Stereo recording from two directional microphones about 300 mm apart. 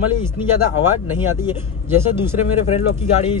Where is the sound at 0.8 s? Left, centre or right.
Centre.